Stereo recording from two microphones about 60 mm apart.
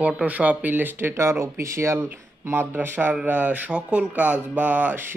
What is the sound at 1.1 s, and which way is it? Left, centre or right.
Speech, right.